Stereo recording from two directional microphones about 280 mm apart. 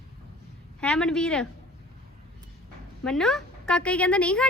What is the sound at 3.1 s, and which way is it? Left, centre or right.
Speech, centre.